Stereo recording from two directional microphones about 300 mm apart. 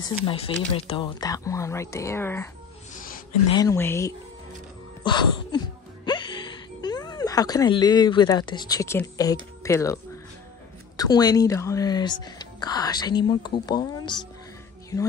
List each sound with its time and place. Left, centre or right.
0.2 s speech: centre
2.9 s a sound: left
3.5 s speech: centre
6.0 s music: centre
9.6 s speech: centre
11.0 s speech: centre